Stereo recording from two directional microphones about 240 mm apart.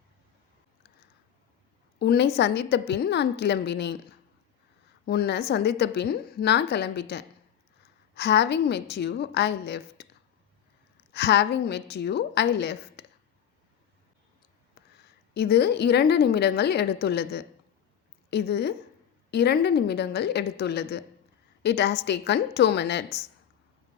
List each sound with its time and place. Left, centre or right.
2.0 s a woman's voice: left
5.0 s a woman's voice: left
11.1 s a woman's voice: left
14.8 s a sound: left
15.3 s a woman's voice: left